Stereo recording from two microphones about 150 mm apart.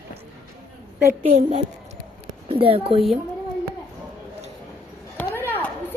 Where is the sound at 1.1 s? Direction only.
60° right (ahead or behind).